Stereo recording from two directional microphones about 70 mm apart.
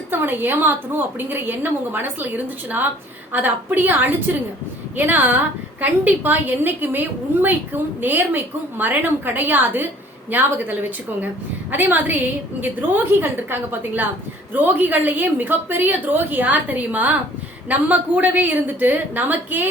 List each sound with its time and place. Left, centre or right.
0.1 s a woman's voice: right